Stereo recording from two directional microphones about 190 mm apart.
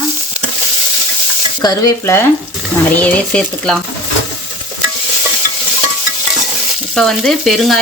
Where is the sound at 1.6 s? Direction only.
20° left (ahead or behind).